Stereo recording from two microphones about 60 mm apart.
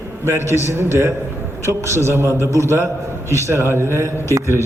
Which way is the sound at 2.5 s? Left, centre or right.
Left.